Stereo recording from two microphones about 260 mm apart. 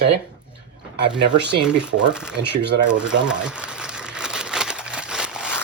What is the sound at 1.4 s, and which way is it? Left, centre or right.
Speech, right.